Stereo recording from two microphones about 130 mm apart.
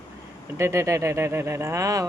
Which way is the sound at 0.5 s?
20° right (ahead or behind).